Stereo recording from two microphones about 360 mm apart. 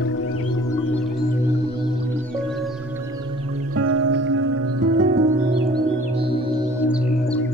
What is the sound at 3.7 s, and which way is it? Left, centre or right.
Music, right.